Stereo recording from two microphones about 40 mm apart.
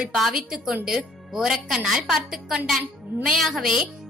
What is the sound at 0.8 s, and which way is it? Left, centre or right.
A woman's voice, centre.